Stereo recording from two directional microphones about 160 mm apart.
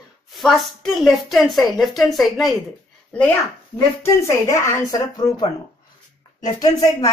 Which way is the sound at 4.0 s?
20° left (ahead or behind).